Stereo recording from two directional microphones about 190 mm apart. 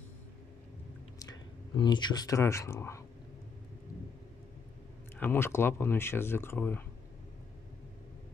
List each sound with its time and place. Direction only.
1.8 s speech: 25° left (ahead or behind)
5.2 s speech: 10° left (ahead or behind)